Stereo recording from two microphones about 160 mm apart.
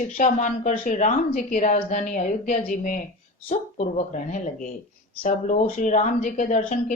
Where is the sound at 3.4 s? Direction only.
45° left (ahead or behind).